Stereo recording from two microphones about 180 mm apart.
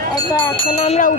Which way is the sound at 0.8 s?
40° left (ahead or behind).